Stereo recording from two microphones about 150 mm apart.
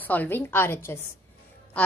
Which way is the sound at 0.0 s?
10° left (ahead or behind).